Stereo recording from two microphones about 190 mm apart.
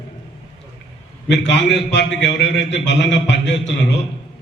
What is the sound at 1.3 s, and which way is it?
A man's voice, 65° left (ahead or behind).